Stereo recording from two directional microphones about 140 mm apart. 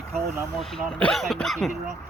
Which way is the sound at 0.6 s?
5° left (ahead or behind).